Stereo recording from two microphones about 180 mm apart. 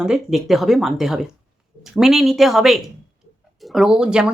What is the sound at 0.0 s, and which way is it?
Speech, 5° right (ahead or behind).